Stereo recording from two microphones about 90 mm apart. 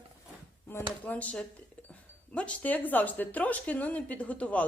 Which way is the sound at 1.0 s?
15° left (ahead or behind).